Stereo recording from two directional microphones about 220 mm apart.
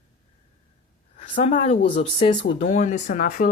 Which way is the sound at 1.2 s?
30° left (ahead or behind).